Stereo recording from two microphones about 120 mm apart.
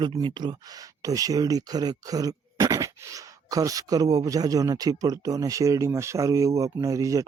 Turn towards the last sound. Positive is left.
turn(degrees=-25)  # may be behind; listen again after turning